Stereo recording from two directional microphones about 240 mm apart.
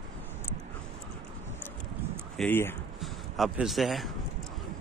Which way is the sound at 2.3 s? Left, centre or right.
Centre.